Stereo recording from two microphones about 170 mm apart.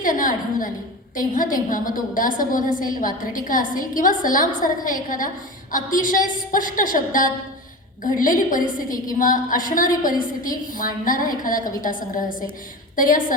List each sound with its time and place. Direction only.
0.0 s a woman's voice: 50° left (ahead or behind)